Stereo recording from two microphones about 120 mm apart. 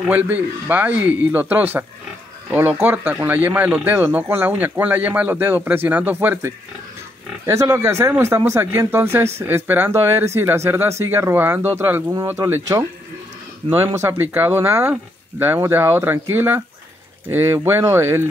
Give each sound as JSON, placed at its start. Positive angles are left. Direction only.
{"t": 0.1, "sound": "speech", "side_deg": -15}
{"t": 13.6, "sound": "speech", "side_deg": -45}
{"t": 13.9, "sound": "speech", "side_deg": -20}